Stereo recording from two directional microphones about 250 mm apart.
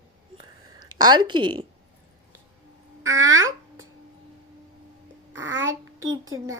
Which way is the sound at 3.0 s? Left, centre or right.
Right.